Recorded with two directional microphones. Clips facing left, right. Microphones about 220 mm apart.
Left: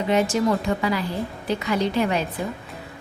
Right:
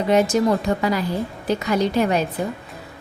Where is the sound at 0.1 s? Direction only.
40° right (ahead or behind).